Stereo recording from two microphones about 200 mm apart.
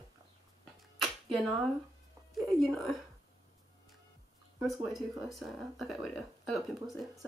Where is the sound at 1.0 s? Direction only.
Centre (ahead or behind).